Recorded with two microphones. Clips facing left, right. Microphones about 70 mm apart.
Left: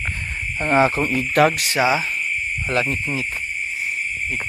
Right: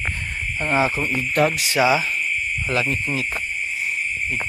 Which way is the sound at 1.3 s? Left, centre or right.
Left.